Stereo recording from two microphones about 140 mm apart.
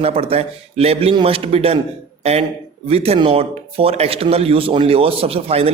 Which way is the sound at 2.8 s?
45° right (ahead or behind).